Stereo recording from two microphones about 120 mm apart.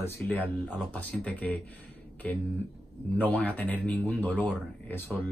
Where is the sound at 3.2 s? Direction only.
10° left (ahead or behind).